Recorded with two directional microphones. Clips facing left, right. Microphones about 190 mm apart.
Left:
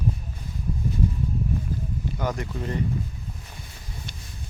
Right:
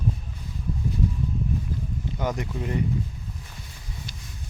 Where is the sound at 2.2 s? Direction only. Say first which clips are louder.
Right 1 dB; 15° right (ahead or behind).